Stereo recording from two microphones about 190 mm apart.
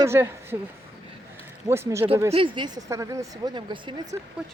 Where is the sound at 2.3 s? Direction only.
25° right (ahead or behind).